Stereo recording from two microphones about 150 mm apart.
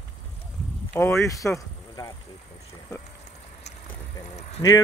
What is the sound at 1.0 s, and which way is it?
Speech, 15° left (ahead or behind).